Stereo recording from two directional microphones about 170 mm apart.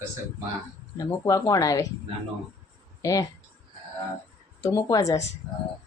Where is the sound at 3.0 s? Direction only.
20° left (ahead or behind).